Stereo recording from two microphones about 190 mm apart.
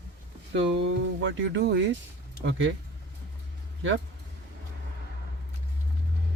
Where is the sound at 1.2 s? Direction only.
80° right.